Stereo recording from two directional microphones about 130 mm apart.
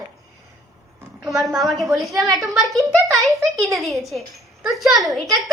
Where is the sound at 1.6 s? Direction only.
Centre (ahead or behind).